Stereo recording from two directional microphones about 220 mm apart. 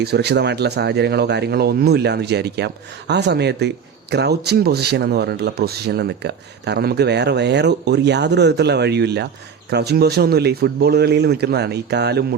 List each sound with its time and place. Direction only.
0.0 s speech: 50° right (ahead or behind)